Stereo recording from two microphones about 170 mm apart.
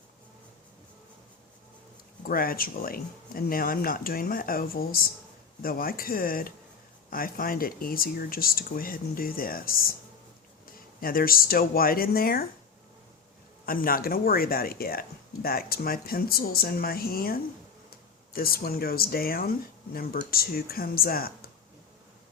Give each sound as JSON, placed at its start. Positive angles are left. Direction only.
{"t": 2.2, "sound": "speech", "side_deg": 60}
{"t": 11.0, "sound": "speech", "side_deg": 60}
{"t": 13.7, "sound": "speech", "side_deg": 60}